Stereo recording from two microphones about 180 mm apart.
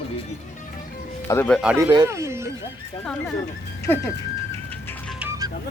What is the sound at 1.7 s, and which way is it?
Speech, 20° right (ahead or behind).